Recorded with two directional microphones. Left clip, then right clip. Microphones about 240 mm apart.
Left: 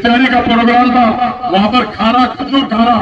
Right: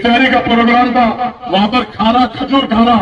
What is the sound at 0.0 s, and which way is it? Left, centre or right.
A man's voice, left.